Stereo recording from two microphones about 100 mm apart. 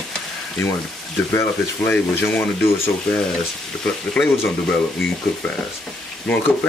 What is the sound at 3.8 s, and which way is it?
Speech, 5° left (ahead or behind).